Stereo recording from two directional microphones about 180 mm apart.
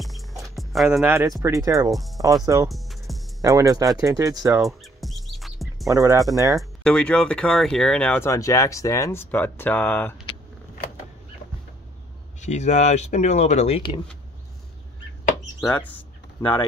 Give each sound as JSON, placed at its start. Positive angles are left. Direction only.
{"t": 0.0, "sound": "music", "side_deg": 0}
{"t": 1.4, "sound": "speech", "side_deg": -20}
{"t": 1.9, "sound": "speech", "side_deg": 0}
{"t": 2.4, "sound": "speech", "side_deg": -20}
{"t": 2.7, "sound": "music", "side_deg": 0}
{"t": 3.4, "sound": "speech", "side_deg": -20}
{"t": 4.6, "sound": "music", "side_deg": 0}
{"t": 5.9, "sound": "speech", "side_deg": -20}
{"t": 6.8, "sound": "speech", "side_deg": 5}
{"t": 12.4, "sound": "speech", "side_deg": 40}
{"t": 15.6, "sound": "speech", "side_deg": 10}